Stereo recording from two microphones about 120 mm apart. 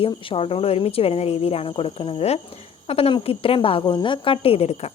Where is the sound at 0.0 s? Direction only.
50° left (ahead or behind).